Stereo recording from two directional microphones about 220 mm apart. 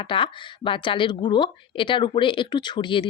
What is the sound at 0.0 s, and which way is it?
Speech, 20° left (ahead or behind).